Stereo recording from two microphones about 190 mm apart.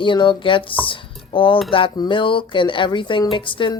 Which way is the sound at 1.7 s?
25° left (ahead or behind).